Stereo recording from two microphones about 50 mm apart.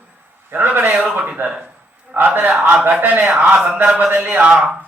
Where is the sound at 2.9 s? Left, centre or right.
Right.